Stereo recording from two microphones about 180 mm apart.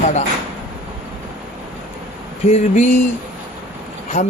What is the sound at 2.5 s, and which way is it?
Speech, 40° left (ahead or behind).